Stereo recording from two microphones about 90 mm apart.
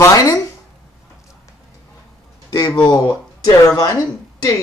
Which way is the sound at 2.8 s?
45° left (ahead or behind).